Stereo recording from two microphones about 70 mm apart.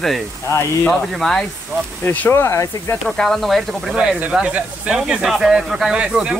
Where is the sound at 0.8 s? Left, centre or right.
Centre.